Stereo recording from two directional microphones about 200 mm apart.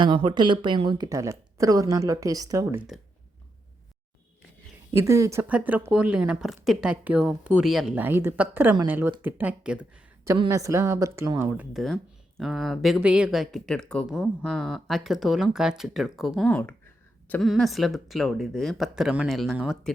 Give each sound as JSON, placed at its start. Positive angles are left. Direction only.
{"t": 0.0, "sound": "speech", "side_deg": -25}
{"t": 4.9, "sound": "speech", "side_deg": -15}
{"t": 10.3, "sound": "speech", "side_deg": -20}